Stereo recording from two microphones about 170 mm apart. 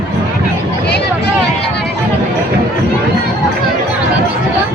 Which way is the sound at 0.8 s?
80° left.